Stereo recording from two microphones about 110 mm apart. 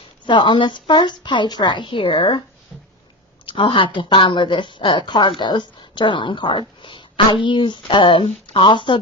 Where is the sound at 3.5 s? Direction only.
50° left (ahead or behind).